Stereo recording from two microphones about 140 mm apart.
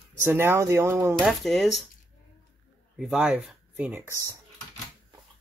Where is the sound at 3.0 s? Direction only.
5° right (ahead or behind).